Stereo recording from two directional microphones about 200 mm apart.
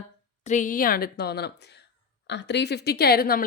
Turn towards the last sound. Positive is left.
turn(degrees=50)  # may be behind; listen again after turning